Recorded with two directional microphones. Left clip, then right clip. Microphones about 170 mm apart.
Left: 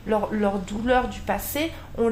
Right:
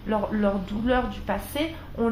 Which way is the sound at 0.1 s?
35° left (ahead or behind).